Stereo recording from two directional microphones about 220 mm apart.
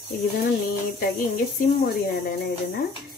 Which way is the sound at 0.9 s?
40° left (ahead or behind).